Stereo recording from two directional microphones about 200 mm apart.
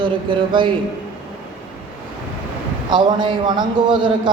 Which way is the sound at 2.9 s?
20° right (ahead or behind).